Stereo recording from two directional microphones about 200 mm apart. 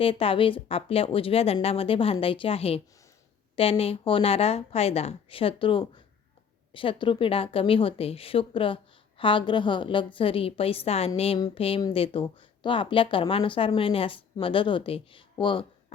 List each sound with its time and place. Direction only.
0.0 s speech: 25° left (ahead or behind)